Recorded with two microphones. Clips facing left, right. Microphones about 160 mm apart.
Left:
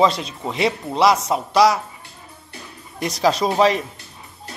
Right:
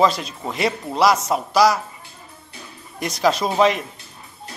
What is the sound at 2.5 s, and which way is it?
Music, centre (ahead or behind).